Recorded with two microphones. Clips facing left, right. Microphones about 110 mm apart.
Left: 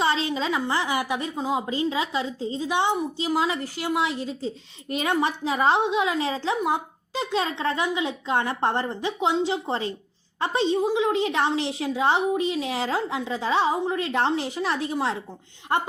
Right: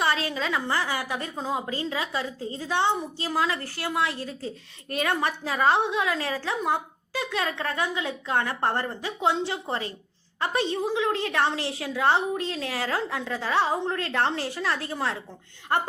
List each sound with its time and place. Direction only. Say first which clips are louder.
0.0 s a woman's voice: left 2 dB; 25° left (ahead or behind)